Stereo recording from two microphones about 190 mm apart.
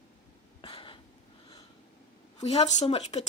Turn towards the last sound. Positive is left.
turn(degrees=35)  # may be behind; listen again after turning